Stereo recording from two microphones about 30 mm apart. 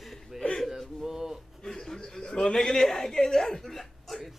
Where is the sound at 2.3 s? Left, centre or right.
Left.